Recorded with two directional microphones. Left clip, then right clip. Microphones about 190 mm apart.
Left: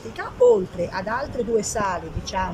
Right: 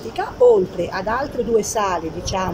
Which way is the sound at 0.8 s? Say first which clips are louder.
Right 4 dB; centre (ahead or behind).